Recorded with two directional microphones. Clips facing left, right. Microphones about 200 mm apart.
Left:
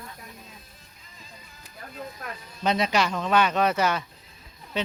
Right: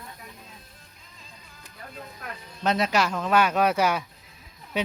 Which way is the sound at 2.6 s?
Centre (ahead or behind).